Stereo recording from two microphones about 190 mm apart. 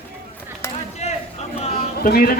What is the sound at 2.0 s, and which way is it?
Speech, 55° left (ahead or behind).